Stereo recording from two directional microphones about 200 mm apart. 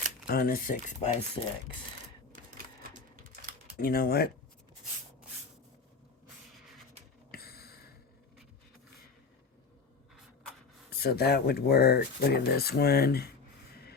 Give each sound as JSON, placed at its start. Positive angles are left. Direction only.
{"t": 0.3, "sound": "speech", "side_deg": 45}
{"t": 3.2, "sound": "typing", "side_deg": -45}
{"t": 3.8, "sound": "speech", "side_deg": 45}
{"t": 7.3, "sound": "a sound", "side_deg": 50}
{"t": 10.9, "sound": "speech", "side_deg": 50}